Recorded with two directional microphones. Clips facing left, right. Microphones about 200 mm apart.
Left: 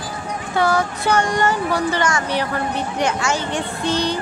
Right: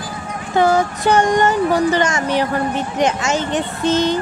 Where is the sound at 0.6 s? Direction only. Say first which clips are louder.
Right 4 dB; 20° right (ahead or behind).